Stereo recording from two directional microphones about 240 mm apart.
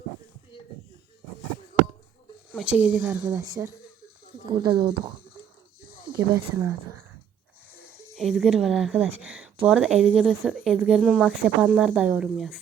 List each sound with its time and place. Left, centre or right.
2.5 s speech: centre
6.1 s speech: centre
8.1 s speech: centre